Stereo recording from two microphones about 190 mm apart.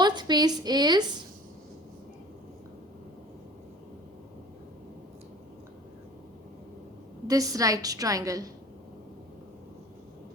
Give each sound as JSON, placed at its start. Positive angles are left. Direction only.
{"t": 0.0, "sound": "a woman's voice", "side_deg": -25}
{"t": 7.3, "sound": "a woman's voice", "side_deg": -20}